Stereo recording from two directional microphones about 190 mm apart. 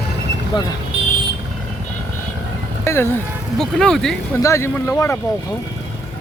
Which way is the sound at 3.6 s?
Centre (ahead or behind).